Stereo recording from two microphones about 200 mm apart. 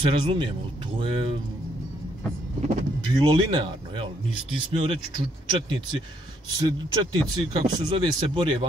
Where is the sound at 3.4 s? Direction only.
20° right (ahead or behind).